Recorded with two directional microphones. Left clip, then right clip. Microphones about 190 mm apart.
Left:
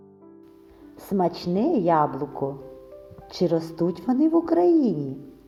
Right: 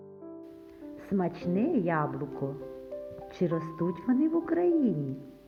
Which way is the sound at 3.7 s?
30° left (ahead or behind).